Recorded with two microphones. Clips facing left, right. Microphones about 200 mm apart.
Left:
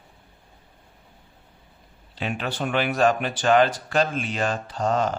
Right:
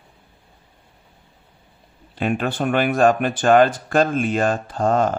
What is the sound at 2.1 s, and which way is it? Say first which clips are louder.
Speech: right 7 dB; 50° right (ahead or behind).